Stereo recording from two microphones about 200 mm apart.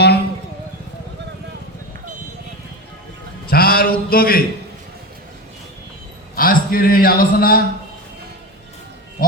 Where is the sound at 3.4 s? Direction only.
50° left (ahead or behind).